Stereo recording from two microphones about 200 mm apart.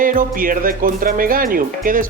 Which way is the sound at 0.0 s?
45° right (ahead or behind).